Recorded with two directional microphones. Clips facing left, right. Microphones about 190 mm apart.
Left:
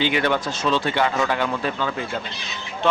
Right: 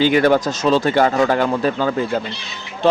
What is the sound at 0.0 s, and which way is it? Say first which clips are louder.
A man's voice: right 7 dB; 40° right (ahead or behind).